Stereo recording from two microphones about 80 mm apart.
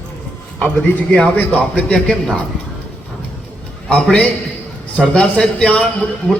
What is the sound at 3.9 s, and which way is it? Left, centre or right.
A man's voice, centre.